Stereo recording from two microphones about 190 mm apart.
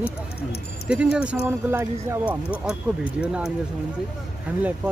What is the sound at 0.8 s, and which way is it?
Speech, 5° right (ahead or behind).